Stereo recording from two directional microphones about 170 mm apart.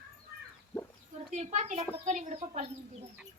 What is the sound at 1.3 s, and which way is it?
A child's voice, 45° right (ahead or behind).